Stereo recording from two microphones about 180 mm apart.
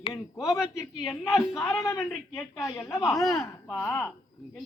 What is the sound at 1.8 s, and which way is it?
Speech, 15° left (ahead or behind).